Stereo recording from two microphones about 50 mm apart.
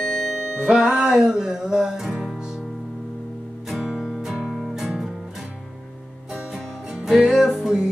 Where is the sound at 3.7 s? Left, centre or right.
Centre.